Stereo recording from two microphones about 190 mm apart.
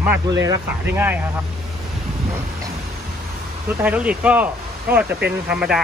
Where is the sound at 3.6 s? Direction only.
5° right (ahead or behind).